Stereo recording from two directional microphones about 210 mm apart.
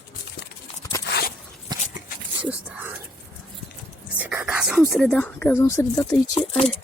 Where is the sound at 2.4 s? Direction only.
5° right (ahead or behind).